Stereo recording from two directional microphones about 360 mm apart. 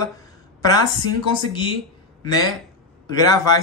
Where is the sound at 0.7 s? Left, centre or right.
Centre.